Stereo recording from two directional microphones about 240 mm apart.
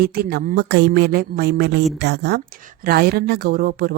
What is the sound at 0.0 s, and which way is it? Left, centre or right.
A woman's voice, right.